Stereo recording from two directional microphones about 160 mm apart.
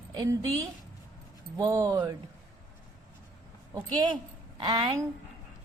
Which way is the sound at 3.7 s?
25° right (ahead or behind).